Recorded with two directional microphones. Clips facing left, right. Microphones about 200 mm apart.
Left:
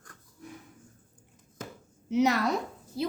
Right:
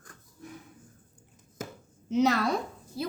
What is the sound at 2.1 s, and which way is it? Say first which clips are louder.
Speech: even; 15° left (ahead or behind).